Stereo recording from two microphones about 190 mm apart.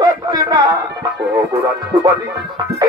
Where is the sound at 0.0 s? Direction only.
20° right (ahead or behind).